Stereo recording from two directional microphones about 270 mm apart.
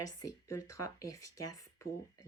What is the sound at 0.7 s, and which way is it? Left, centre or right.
Speech, centre.